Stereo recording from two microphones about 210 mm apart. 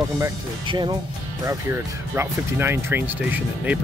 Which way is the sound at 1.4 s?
10° right (ahead or behind).